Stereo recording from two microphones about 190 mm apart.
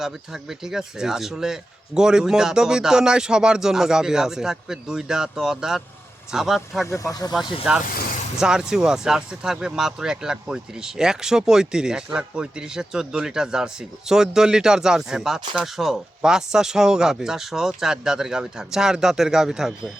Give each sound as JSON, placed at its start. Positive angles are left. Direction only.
{"t": 0.0, "sound": "speech", "side_deg": 0}
{"t": 6.8, "sound": "speech", "side_deg": 15}
{"t": 7.7, "sound": "speech", "side_deg": -5}